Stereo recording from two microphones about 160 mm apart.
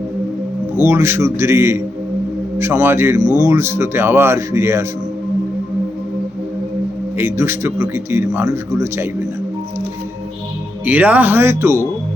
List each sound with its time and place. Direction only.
0.8 s speech: 15° right (ahead or behind)
7.2 s speech: 15° right (ahead or behind)
10.8 s speech: 10° right (ahead or behind)